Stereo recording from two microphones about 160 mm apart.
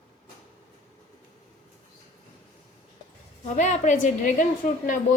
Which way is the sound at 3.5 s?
50° left (ahead or behind).